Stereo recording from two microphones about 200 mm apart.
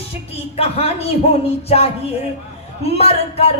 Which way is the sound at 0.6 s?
30° left (ahead or behind).